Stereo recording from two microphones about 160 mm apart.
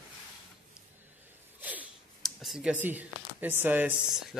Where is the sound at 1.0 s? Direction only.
10° right (ahead or behind).